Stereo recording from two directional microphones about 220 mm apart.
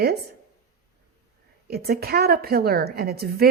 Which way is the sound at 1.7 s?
45° right (ahead or behind).